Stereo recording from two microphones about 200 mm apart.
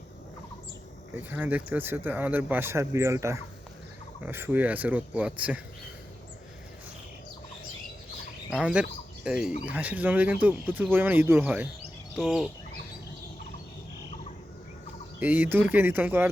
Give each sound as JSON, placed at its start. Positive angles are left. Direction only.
{"t": 1.1, "sound": "speech", "side_deg": -10}
{"t": 8.4, "sound": "speech", "side_deg": -5}
{"t": 12.1, "sound": "a sound", "side_deg": 0}
{"t": 15.2, "sound": "speech", "side_deg": -10}